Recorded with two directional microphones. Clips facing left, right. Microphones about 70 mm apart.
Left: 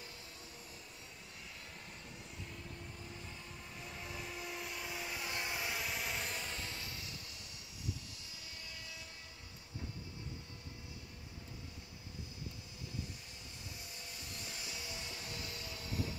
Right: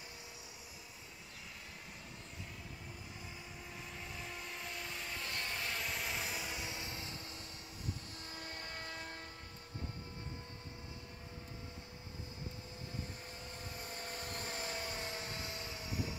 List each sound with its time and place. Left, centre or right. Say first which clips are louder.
3.8 s vehicle: left 3 dB; centre; by 7.2 s right
8.3 s train: right 6 dB; right
13.7 s a sound: right 6 dB; right